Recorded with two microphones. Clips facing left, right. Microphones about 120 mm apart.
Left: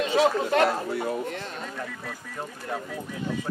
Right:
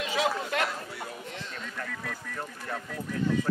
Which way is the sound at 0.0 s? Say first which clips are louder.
Left 7 dB; 35° left (ahead or behind).